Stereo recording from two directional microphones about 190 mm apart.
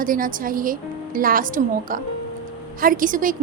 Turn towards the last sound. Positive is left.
turn(degrees=-45)  # may be behind; listen again after turning